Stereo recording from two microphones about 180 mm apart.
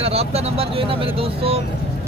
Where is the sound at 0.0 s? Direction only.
35° right (ahead or behind).